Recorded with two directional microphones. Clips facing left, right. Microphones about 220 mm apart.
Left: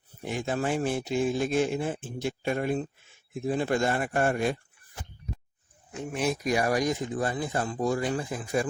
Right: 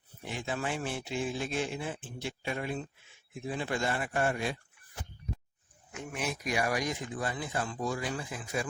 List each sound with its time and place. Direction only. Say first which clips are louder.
0.2 s speech: left 6 dB; 45° left (ahead or behind)
5.9 s speech: left 7 dB; 35° left (ahead or behind)